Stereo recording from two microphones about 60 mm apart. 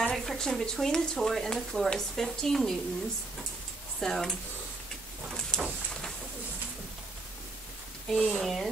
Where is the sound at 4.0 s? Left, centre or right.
Centre.